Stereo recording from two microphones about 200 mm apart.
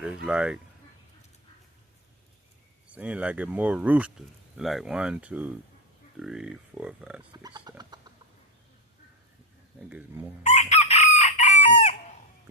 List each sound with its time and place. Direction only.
0.3 s speech: 5° right (ahead or behind)
2.9 s speech: 5° right (ahead or behind)
7.4 s speech: 20° right (ahead or behind)
9.9 s speech: 10° right (ahead or behind)
10.4 s chicken: 35° left (ahead or behind)